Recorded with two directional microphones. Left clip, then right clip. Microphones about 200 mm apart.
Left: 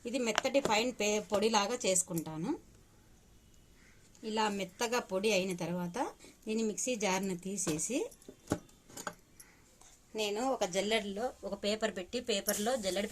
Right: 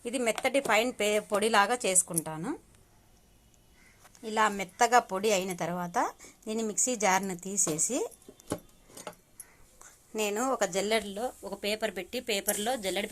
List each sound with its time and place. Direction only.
0.0 s speech: 20° right (ahead or behind)
4.4 s speech: 20° right (ahead or behind)
10.1 s a woman's voice: 15° right (ahead or behind); by 13.1 s centre (ahead or behind)